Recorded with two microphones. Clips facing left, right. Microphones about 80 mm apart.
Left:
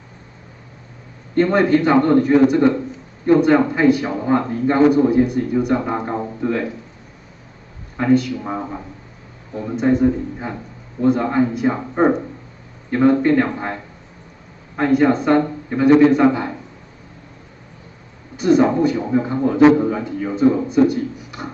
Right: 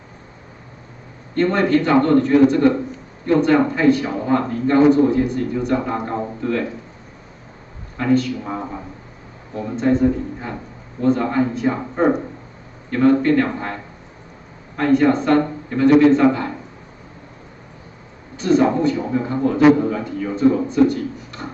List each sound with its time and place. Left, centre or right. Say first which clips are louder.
1.3 s a man's voice: left 2 dB; centre
8.0 s a man's voice: left 2 dB; centre
9.8 s a man's voice: left 1 dB; centre
14.8 s a man's voice: even; centre
18.3 s a man's voice: left 1 dB; centre